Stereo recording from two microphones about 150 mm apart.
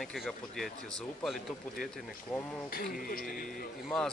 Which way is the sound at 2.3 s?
5° left (ahead or behind).